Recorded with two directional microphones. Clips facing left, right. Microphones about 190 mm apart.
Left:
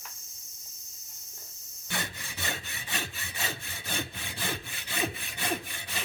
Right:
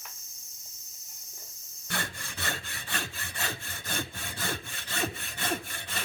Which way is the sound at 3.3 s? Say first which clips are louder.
Even; 5° left (ahead or behind).